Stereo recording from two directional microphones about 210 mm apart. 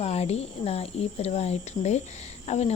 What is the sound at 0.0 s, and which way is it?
Speech, 30° left (ahead or behind).